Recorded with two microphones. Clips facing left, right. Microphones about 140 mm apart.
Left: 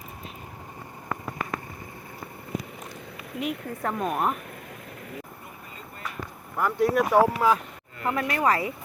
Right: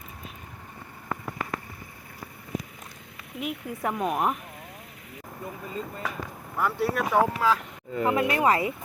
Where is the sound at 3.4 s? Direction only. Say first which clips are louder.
Left 1 dB; 10° right (ahead or behind).